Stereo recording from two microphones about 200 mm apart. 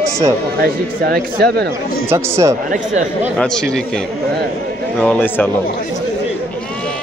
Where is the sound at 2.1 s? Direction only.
15° right (ahead or behind).